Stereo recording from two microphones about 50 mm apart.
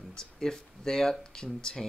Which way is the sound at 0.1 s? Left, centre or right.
Centre.